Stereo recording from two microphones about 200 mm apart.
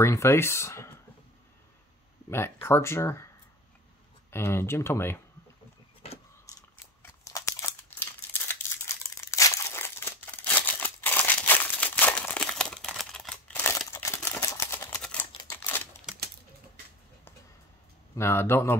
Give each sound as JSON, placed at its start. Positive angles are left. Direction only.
{"t": 0.0, "sound": "speech", "side_deg": 15}
{"t": 2.2, "sound": "speech", "side_deg": 10}
{"t": 4.3, "sound": "speech", "side_deg": 10}
{"t": 6.5, "sound": "a sound", "side_deg": 15}
{"t": 7.0, "sound": "crumpling", "side_deg": 15}
{"t": 15.4, "sound": "scissors", "side_deg": 10}
{"t": 18.1, "sound": "speech", "side_deg": 10}